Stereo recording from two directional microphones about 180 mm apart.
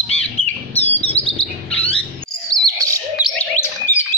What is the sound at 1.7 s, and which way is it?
Rodents, 5° left (ahead or behind).